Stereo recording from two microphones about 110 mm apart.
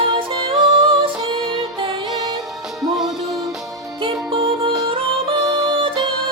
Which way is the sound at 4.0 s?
55° right (ahead or behind).